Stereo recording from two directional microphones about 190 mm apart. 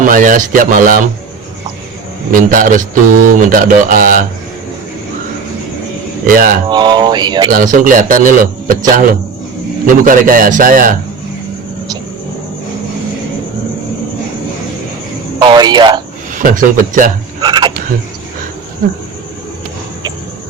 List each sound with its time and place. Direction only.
0.0 s speech: 45° right (ahead or behind)
2.3 s speech: 45° right (ahead or behind)
6.2 s speech: 50° right (ahead or behind)
6.7 s speech: 25° right (ahead or behind)
7.5 s speech: 45° right (ahead or behind)
15.4 s speech: 25° right (ahead or behind)
16.3 s speech: 45° right (ahead or behind)
17.4 s a sound: 25° right (ahead or behind)